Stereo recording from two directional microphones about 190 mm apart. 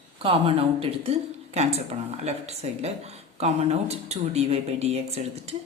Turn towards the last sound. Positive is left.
turn(degrees=-35)  # may be behind; listen again after turning